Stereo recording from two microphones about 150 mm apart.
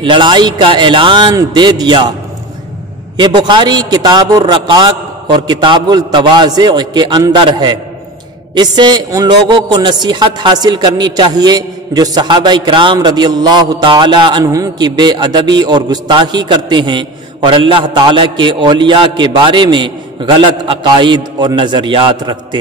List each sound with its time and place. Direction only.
0.0 s a man's voice: 30° right (ahead or behind)
3.2 s a man's voice: 30° right (ahead or behind)